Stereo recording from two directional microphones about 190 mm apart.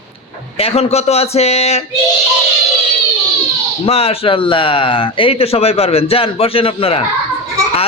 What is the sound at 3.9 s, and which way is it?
A man's voice, 30° left (ahead or behind).